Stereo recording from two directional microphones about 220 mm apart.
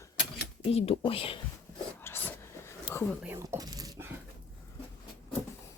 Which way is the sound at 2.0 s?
10° left (ahead or behind).